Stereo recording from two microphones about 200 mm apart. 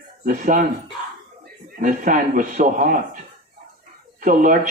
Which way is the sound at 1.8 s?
40° right (ahead or behind).